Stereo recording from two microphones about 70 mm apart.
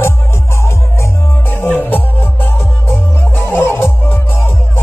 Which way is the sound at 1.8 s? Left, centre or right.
Left.